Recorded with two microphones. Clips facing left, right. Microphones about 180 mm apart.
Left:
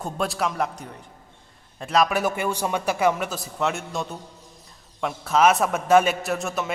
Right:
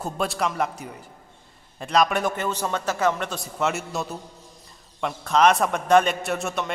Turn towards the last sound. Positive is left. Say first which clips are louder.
# even
turn(degrees=0)  # may be behind; listen again after turning